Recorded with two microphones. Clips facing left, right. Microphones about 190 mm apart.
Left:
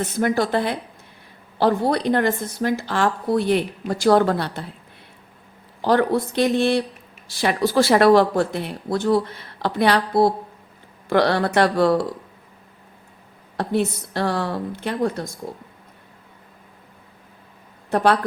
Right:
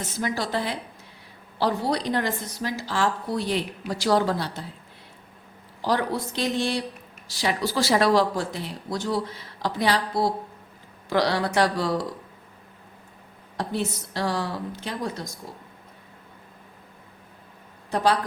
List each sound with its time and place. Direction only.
0.0 s speech: 55° left (ahead or behind)
5.8 s speech: 55° left (ahead or behind)
13.6 s speech: 60° left (ahead or behind)
17.9 s speech: 60° left (ahead or behind)